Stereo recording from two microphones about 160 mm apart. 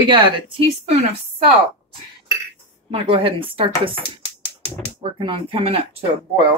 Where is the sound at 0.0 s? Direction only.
30° right (ahead or behind).